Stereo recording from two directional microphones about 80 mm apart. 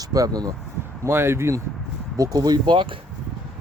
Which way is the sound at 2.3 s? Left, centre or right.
Right.